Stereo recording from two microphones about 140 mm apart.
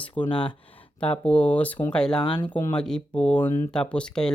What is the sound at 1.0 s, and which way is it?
Speech, 10° left (ahead or behind).